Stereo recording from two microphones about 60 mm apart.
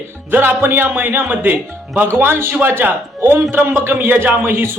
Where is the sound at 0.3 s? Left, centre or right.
Right.